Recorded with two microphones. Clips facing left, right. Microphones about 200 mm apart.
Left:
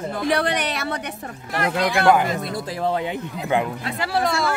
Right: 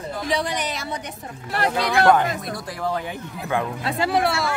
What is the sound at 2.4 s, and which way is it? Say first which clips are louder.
Speech: left 3 dB; 25° left (ahead or behind).